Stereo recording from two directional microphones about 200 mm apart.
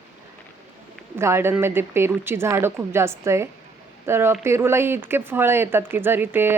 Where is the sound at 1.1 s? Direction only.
10° right (ahead or behind).